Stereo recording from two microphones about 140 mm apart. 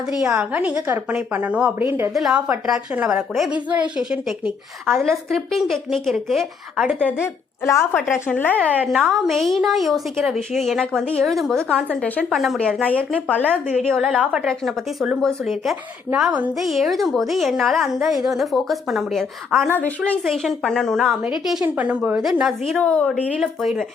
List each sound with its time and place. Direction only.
0.1 s a woman's voice: 5° right (ahead or behind)
2.1 s a woman's voice: 5° right (ahead or behind)
7.6 s a woman's voice: 20° left (ahead or behind)
8.9 s a woman's voice: centre (ahead or behind)
12.3 s speech: centre (ahead or behind)
14.3 s a woman's voice: 5° right (ahead or behind)
23.1 s a woman's voice: 5° right (ahead or behind)